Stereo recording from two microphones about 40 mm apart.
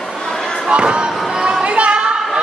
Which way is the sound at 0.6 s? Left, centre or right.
Right.